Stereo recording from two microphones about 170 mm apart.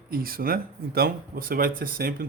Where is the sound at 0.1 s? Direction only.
60° right (ahead or behind).